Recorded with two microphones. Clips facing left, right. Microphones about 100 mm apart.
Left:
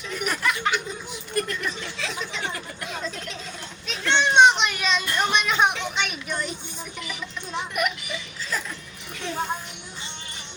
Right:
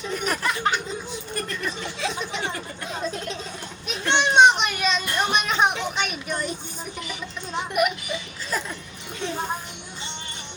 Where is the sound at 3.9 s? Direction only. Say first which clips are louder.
Even; 15° right (ahead or behind).